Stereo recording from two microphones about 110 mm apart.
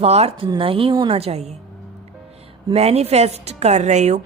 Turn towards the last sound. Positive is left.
turn(degrees=-90)